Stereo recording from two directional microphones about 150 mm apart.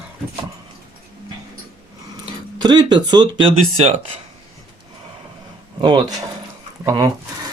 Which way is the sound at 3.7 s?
45° right (ahead or behind).